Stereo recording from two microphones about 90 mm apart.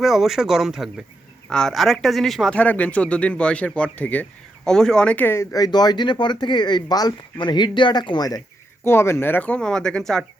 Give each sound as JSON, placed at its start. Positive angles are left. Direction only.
{"t": 0.0, "sound": "speech", "side_deg": 0}
{"t": 1.5, "sound": "speech", "side_deg": 5}
{"t": 2.6, "sound": "speech", "side_deg": 15}
{"t": 8.8, "sound": "speech", "side_deg": 30}